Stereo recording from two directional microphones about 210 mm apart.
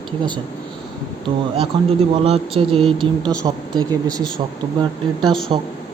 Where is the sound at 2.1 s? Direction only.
25° right (ahead or behind).